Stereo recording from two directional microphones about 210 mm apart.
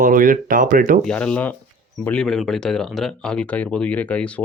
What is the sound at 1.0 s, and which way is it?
Speech, 5° left (ahead or behind).